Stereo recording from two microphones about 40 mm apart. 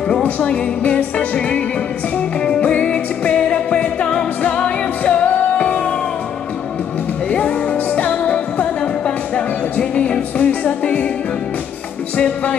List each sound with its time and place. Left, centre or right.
0.2 s music: left
7.2 s music: left